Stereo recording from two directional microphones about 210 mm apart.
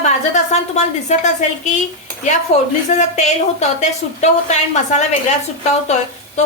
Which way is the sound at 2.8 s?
35° left (ahead or behind).